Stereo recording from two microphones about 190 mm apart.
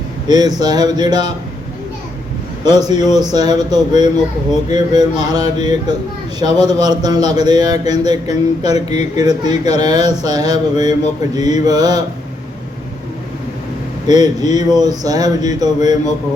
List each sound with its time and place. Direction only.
0.3 s a man's voice: 20° right (ahead or behind)
2.6 s a man's voice: 20° right (ahead or behind)
14.1 s a man's voice: 20° right (ahead or behind)